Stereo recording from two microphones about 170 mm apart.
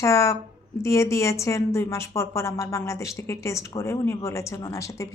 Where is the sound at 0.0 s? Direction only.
15° left (ahead or behind).